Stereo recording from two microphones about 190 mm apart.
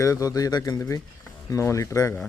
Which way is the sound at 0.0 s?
15° left (ahead or behind).